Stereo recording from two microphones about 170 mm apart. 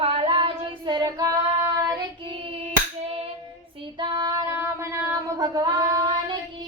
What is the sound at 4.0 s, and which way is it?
Female singing, 25° right (ahead or behind).